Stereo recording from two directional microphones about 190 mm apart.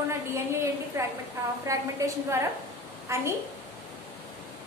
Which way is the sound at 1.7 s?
15° right (ahead or behind).